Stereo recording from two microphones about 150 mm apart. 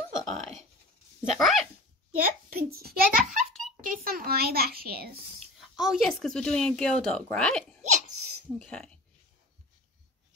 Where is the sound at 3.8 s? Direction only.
75° right (ahead or behind).